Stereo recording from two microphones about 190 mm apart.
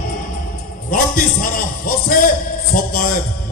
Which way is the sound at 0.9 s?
45° left (ahead or behind).